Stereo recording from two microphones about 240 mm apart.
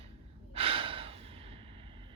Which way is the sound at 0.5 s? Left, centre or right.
Right.